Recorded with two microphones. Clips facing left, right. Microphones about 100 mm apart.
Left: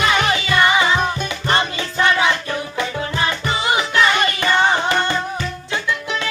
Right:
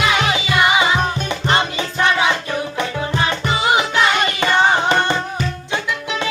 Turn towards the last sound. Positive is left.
turn(degrees=-20)  # may be behind; listen again after turning